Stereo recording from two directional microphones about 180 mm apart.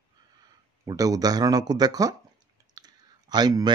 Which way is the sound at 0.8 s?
20° right (ahead or behind).